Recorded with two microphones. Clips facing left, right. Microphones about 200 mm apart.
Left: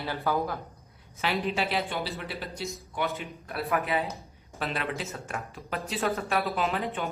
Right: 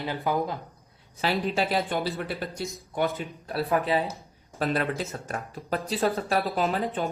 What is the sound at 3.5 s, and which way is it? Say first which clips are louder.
Speech: right 4 dB; 30° right (ahead or behind).